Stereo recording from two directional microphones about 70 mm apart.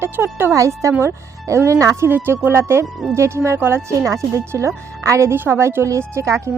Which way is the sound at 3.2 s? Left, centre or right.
Right.